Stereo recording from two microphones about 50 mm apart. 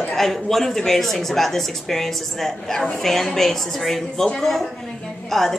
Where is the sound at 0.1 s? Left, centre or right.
Centre.